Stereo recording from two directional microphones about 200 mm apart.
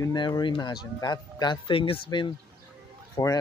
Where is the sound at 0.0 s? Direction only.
20° left (ahead or behind).